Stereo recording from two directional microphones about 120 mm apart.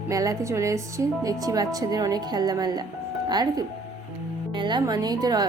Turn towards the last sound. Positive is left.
turn(degrees=-35)  # may be behind; listen again after turning